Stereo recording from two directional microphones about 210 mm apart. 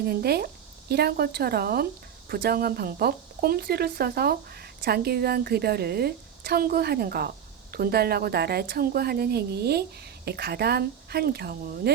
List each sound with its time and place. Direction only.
0.0 s speech: 50° right (ahead or behind)